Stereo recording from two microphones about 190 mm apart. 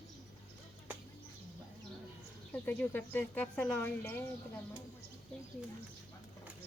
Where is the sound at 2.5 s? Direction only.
10° left (ahead or behind).